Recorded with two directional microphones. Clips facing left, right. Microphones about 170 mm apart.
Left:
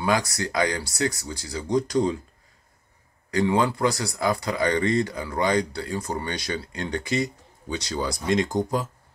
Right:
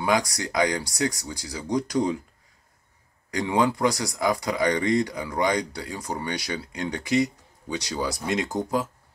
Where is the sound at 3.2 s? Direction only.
15° right (ahead or behind).